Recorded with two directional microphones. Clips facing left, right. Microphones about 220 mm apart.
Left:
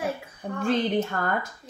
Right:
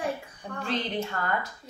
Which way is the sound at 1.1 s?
45° left (ahead or behind).